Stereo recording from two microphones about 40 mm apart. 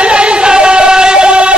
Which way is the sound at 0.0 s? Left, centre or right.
Right.